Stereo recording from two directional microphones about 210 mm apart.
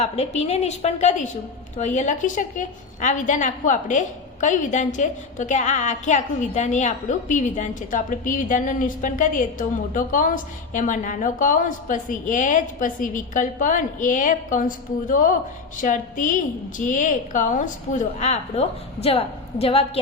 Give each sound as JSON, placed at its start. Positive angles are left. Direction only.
{"t": 0.0, "sound": "a woman's voice", "side_deg": 30}